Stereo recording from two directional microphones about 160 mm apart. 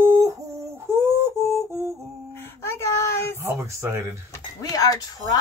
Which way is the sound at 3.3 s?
15° right (ahead or behind).